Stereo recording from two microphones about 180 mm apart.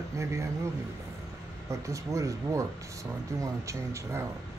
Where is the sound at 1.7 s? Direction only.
15° right (ahead or behind).